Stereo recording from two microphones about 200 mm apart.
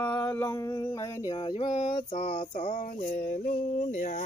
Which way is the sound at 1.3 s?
25° left (ahead or behind).